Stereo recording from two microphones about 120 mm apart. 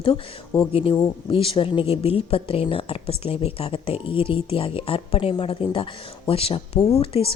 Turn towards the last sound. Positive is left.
turn(degrees=55)  # may be behind; listen again after turning